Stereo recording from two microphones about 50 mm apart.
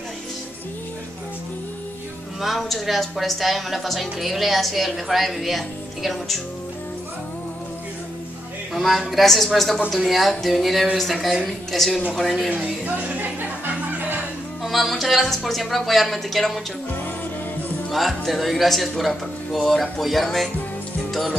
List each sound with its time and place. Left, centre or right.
2.4 s a woman's voice: centre
8.7 s a woman's voice: centre
12.4 s speech: right
14.6 s a woman's voice: centre
17.9 s a woman's voice: centre